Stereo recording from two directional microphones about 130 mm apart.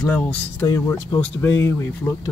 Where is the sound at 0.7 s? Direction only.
30° left (ahead or behind).